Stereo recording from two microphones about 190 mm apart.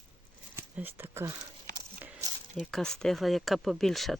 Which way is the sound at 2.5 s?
Centre (ahead or behind).